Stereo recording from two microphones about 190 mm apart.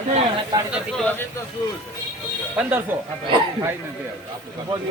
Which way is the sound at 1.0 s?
10° left (ahead or behind).